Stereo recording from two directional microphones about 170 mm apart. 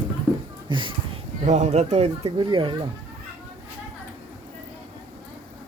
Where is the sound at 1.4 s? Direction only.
45° right (ahead or behind).